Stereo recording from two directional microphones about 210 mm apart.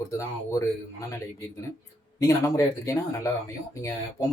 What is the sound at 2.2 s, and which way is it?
Speech, 15° left (ahead or behind).